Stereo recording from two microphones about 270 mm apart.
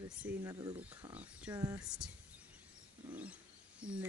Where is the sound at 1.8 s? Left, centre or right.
Centre.